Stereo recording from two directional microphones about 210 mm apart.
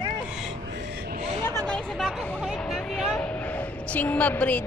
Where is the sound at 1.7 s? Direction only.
Centre (ahead or behind).